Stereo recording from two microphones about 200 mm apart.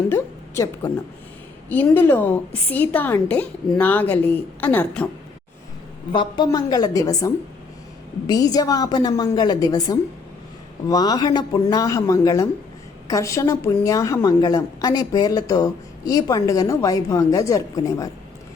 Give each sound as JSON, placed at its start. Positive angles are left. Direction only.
{"t": 0.1, "sound": "a sound", "side_deg": 10}
{"t": 1.7, "sound": "a woman's voice", "side_deg": 10}
{"t": 6.1, "sound": "a woman's voice", "side_deg": 20}